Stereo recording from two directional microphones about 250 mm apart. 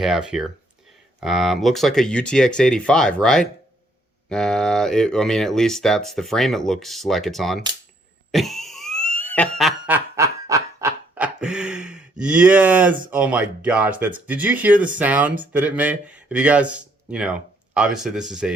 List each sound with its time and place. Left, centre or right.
0.0 s speech: centre
8.3 s a sound: centre
12.2 s speech: centre